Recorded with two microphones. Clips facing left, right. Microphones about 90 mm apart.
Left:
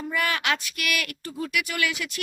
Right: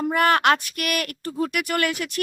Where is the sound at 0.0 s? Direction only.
55° right (ahead or behind).